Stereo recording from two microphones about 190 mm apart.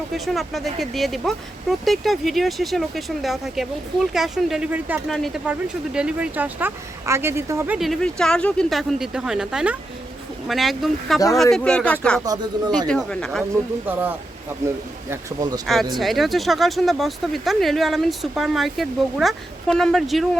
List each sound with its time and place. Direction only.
0.1 s speech: centre (ahead or behind)
7.8 s speech: centre (ahead or behind)
12.2 s speech: 20° right (ahead or behind)
12.9 s speech: 5° left (ahead or behind)
13.8 s speech: 10° right (ahead or behind)
15.6 s speech: centre (ahead or behind)